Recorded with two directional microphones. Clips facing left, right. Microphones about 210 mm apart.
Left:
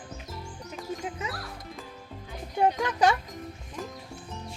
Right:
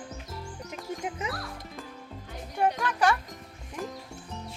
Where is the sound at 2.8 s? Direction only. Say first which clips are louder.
Left 2 dB; 25° left (ahead or behind).